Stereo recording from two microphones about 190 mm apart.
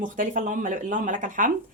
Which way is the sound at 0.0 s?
45° right (ahead or behind).